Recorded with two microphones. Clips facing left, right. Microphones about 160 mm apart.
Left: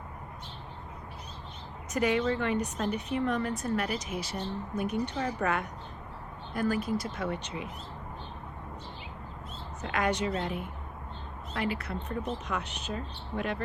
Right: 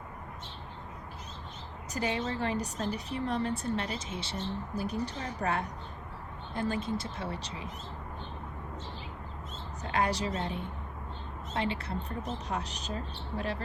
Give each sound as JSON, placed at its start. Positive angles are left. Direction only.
{"t": 1.9, "sound": "a woman's voice", "side_deg": -30}
{"t": 9.9, "sound": "a woman's voice", "side_deg": -35}